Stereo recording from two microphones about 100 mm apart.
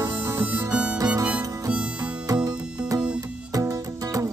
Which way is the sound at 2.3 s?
40° right (ahead or behind).